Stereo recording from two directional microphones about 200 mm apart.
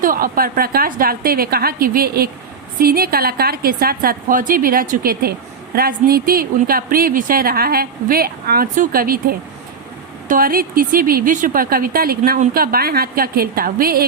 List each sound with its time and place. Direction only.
0.0 s speech: 45° right (ahead or behind)